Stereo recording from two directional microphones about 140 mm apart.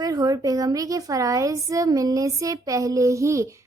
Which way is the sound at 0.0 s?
25° right (ahead or behind).